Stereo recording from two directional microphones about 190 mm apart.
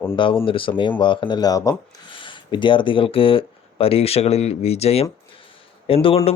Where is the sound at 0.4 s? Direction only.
25° left (ahead or behind).